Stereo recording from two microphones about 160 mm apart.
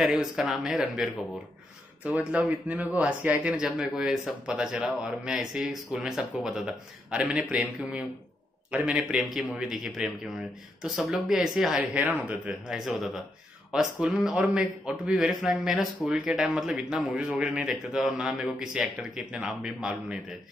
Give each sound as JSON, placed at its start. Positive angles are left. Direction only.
{"t": 0.0, "sound": "speech", "side_deg": 0}